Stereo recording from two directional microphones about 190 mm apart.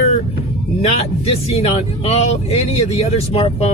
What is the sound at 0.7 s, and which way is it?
A man's voice, 35° left (ahead or behind).